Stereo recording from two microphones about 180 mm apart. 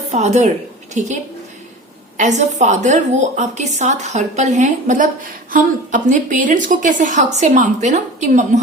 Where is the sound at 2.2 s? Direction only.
40° right (ahead or behind).